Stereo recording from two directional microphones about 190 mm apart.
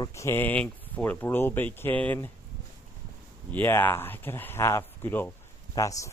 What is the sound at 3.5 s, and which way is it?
Speech, 10° left (ahead or behind).